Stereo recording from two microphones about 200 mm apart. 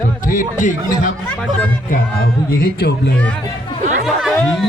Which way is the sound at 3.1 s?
5° left (ahead or behind).